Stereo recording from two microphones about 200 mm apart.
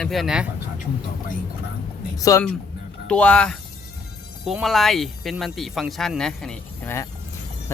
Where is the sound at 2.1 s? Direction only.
15° left (ahead or behind).